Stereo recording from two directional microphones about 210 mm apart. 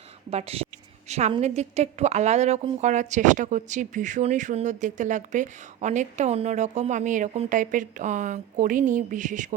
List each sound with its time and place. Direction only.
0.3 s a woman's voice: 30° right (ahead or behind)